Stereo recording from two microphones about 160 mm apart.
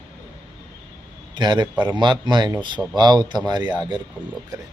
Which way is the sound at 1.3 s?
25° right (ahead or behind).